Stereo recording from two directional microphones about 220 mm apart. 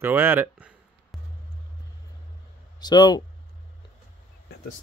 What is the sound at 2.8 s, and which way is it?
Speech, 20° left (ahead or behind).